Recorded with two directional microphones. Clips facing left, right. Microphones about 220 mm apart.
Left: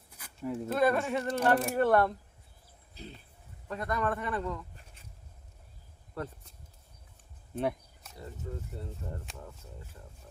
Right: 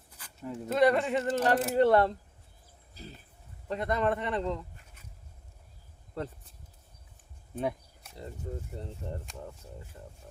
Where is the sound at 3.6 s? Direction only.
25° right (ahead or behind).